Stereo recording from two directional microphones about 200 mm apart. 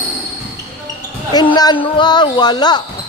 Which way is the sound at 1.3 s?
20° left (ahead or behind).